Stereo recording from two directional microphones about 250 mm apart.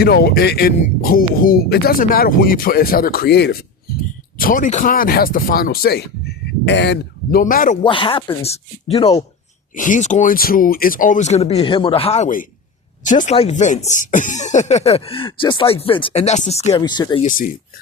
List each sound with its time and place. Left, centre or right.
0.0 s speech: left
7.9 s speech: left
9.7 s speech: left
17.2 s speech: left